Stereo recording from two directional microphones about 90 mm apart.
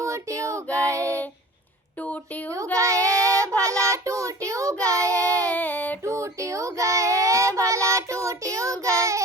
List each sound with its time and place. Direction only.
0.0 s child singing: 35° right (ahead or behind)
0.9 s a sound: 35° right (ahead or behind)
2.7 s child singing: 35° right (ahead or behind)
5.5 s child singing: 20° left (ahead or behind)
6.1 s child singing: 35° right (ahead or behind)